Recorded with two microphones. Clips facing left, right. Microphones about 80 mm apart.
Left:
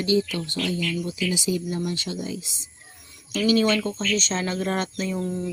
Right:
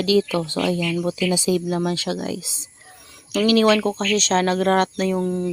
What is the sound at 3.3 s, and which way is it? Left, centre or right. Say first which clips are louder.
Speech: right 4 dB; right.